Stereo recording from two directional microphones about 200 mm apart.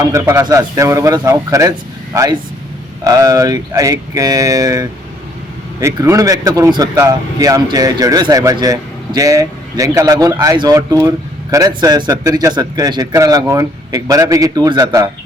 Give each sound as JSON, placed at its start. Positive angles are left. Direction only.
{"t": 0.0, "sound": "speech", "side_deg": -15}